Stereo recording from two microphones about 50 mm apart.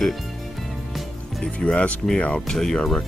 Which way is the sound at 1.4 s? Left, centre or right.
Left.